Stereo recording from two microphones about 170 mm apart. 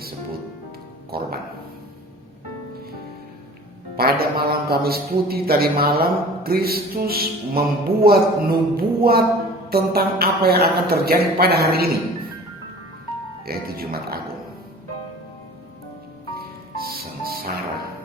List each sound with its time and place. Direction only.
1.1 s speech: 65° right (ahead or behind)
3.9 s a man's voice: 65° right (ahead or behind)
13.4 s a man's voice: 65° right (ahead or behind)
16.3 s music: 65° right (ahead or behind)